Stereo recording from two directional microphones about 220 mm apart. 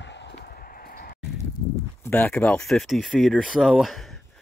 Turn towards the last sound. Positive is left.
turn(degrees=0)  # may be behind; listen again after turning